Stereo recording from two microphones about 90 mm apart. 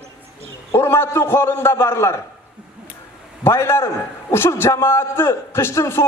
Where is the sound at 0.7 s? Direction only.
30° left (ahead or behind).